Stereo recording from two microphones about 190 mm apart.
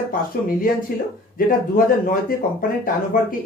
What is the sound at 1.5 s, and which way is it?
Speech, 50° left (ahead or behind).